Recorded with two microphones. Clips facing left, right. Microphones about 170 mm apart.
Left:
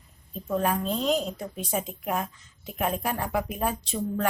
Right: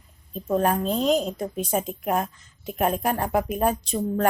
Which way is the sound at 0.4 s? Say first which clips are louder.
Right 4 dB; 40° right (ahead or behind).